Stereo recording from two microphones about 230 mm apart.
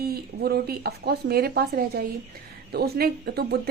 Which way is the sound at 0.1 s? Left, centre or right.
Right.